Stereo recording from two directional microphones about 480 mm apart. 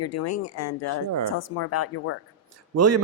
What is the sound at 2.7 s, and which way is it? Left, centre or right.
Speech, right.